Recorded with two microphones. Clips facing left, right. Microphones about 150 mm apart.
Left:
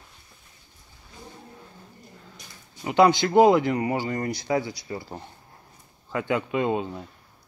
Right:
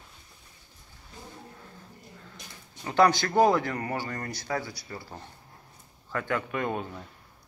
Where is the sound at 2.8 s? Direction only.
15° left (ahead or behind).